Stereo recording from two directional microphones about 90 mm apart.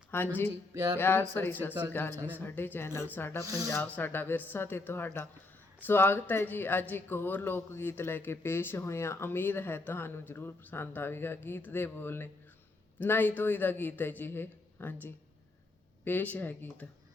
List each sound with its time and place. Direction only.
0.1 s speech: 25° left (ahead or behind)
0.7 s music: 40° right (ahead or behind)
0.9 s speech: 25° left (ahead or behind)
3.4 s speech: 40° right (ahead or behind)
3.9 s speech: 20° left (ahead or behind)